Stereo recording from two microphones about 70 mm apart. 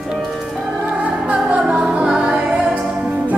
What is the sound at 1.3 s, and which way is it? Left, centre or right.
Music, centre.